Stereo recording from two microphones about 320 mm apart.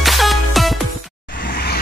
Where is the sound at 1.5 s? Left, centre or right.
Left.